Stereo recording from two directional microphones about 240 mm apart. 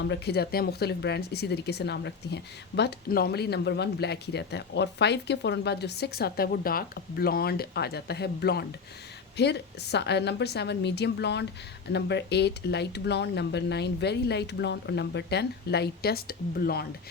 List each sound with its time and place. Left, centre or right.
0.0 s speech: left